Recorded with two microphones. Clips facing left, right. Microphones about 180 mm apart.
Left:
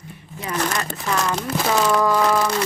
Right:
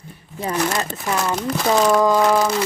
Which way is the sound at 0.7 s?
20° right (ahead or behind).